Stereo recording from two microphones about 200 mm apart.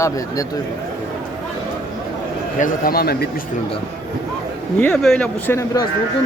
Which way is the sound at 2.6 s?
45° left (ahead or behind).